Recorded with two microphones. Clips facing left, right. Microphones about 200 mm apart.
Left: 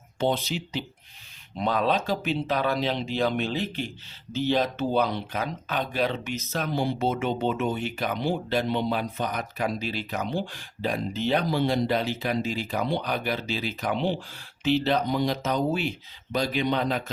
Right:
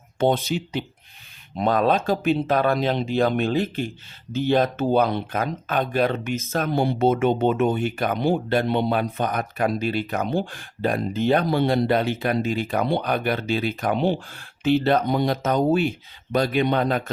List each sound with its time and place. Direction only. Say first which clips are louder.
0.2 s speech: right 5 dB; 50° right (ahead or behind)